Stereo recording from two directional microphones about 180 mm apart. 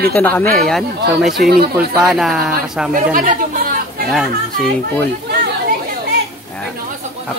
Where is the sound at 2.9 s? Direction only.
45° right (ahead or behind).